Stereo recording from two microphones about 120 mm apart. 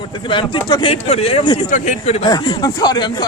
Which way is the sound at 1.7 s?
90° left.